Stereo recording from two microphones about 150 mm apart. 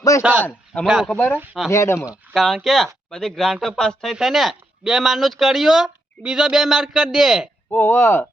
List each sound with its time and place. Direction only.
0.2 s a man's voice: 10° right (ahead or behind)
0.4 s a man's voice: 10° left (ahead or behind)
0.9 s speech: 5° right (ahead or behind)
1.7 s speech: 20° left (ahead or behind)
2.0 s speech: centre (ahead or behind)
7.7 s speech: 15° left (ahead or behind)